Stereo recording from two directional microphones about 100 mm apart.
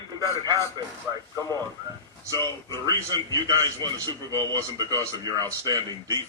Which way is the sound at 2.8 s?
45° right (ahead or behind).